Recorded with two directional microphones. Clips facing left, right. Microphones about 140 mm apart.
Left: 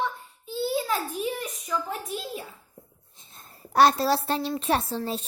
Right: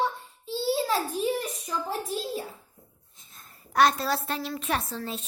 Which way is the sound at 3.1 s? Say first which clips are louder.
Left 4 dB; 30° left (ahead or behind).